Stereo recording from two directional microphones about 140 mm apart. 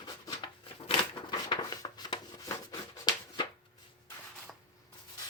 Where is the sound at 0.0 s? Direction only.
35° left (ahead or behind).